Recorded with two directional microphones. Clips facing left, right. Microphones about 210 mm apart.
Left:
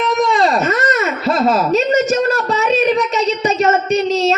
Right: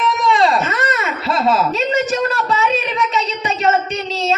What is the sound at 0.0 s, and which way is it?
Baby cry, 40° left (ahead or behind).